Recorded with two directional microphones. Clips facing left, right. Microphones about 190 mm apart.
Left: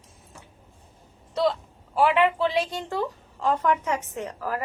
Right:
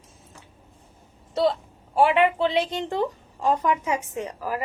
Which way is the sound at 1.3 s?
25° right (ahead or behind).